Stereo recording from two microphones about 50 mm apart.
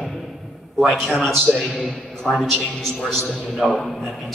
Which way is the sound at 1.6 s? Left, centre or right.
Left.